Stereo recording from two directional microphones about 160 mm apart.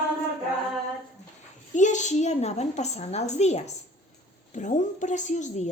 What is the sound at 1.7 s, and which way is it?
A woman's voice, 50° left (ahead or behind).